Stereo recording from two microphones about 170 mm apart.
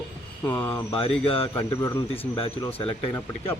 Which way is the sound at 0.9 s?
35° left (ahead or behind).